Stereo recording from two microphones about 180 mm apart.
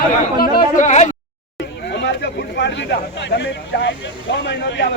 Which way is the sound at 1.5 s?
70° left (ahead or behind).